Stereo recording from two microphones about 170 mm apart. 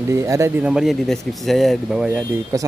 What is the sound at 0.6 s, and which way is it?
Speech, 5° right (ahead or behind).